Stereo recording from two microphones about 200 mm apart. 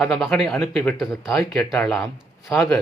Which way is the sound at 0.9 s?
Centre (ahead or behind).